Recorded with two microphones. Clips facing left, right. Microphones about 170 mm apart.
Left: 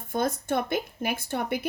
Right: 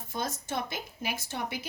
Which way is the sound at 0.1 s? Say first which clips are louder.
Left 8 dB; 55° left (ahead or behind).